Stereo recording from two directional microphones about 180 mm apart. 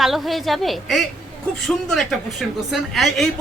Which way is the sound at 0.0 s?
Centre (ahead or behind).